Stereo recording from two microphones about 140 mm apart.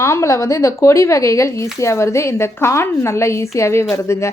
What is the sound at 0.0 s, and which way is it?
A woman's voice, 20° left (ahead or behind).